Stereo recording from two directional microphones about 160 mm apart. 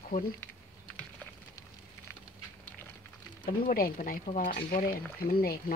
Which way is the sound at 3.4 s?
65° left (ahead or behind).